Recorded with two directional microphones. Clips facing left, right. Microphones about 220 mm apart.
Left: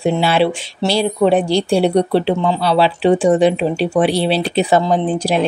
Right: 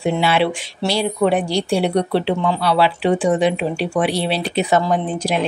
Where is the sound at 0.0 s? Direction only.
35° left (ahead or behind).